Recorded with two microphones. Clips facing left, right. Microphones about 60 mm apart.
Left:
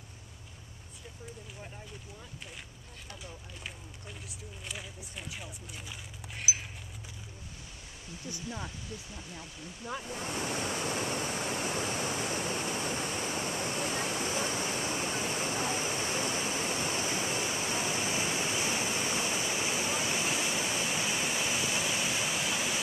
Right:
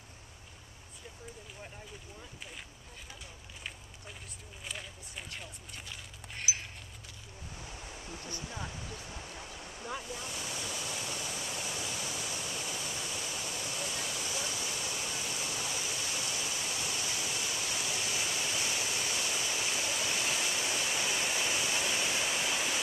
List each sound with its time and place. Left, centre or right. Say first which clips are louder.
4.6 s speech: even; centre
8.5 s speech: left 4 dB; centre
10.0 s waves: left 5 dB; left; by 22.8 s centre